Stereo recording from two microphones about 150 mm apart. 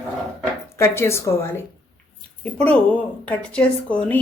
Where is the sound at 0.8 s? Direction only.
15° left (ahead or behind).